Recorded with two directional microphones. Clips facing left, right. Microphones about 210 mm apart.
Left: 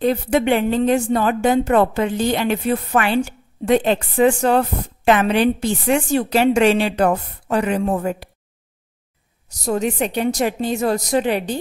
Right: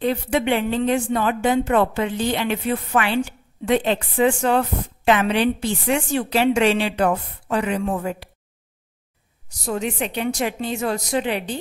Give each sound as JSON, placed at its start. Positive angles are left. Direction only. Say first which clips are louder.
{"t": 0.0, "sound": "speech", "louder": "left 3 dB", "side_deg": 40}
{"t": 9.5, "sound": "a woman's voice", "louder": "left 4 dB", "side_deg": 40}